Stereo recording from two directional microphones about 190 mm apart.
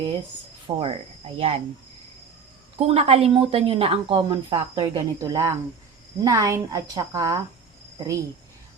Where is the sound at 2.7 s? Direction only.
30° right (ahead or behind).